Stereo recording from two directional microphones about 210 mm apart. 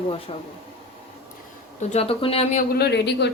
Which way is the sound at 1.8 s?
30° left (ahead or behind).